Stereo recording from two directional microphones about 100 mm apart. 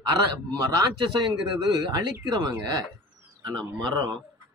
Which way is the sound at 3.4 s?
45° right (ahead or behind).